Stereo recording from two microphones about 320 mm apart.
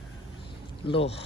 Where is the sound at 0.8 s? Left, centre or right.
Centre.